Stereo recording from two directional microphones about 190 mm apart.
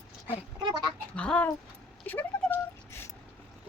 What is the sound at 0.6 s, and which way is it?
Goat, 20° right (ahead or behind).